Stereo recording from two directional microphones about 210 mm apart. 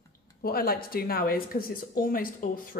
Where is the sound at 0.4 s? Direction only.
45° left (ahead or behind).